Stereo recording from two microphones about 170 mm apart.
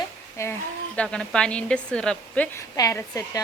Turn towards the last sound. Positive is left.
turn(degrees=20)  # may be behind; listen again after turning